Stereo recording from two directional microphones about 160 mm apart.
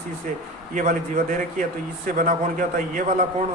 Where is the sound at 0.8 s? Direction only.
55° right (ahead or behind).